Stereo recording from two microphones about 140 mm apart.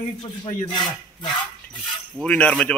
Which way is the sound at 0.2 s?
30° left (ahead or behind).